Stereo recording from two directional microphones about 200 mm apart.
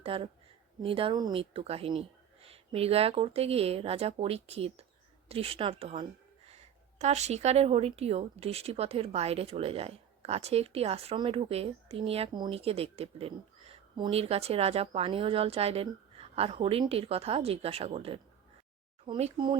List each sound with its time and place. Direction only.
0.0 s speech: 25° right (ahead or behind)